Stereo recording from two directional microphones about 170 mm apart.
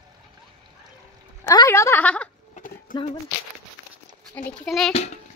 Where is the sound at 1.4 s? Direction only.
20° left (ahead or behind).